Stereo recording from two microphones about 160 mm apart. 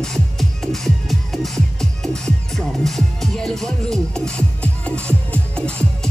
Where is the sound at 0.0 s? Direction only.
Centre (ahead or behind).